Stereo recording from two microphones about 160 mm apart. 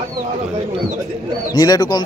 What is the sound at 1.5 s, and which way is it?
Speech, 25° left (ahead or behind).